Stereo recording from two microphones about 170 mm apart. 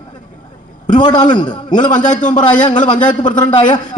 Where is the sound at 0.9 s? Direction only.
25° left (ahead or behind).